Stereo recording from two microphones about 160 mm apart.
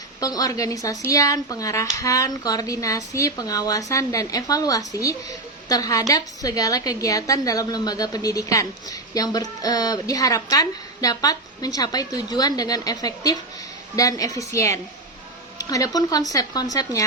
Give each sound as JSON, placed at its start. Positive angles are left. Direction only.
{"t": 0.2, "sound": "a woman's voice", "side_deg": 25}